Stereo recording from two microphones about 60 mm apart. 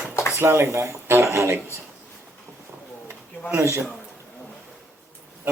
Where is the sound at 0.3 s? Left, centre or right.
Right.